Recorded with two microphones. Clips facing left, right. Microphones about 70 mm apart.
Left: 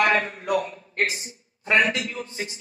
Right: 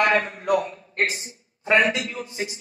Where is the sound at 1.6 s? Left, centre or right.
Centre.